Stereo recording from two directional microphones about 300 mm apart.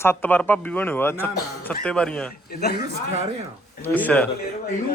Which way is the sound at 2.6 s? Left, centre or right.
Left.